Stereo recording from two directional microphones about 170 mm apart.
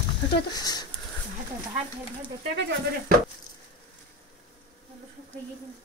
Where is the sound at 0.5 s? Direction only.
25° left (ahead or behind).